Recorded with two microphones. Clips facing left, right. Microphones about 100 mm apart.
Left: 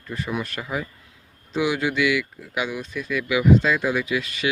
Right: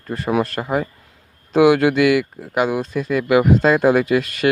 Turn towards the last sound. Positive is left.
turn(degrees=-50)  # may be behind; listen again after turning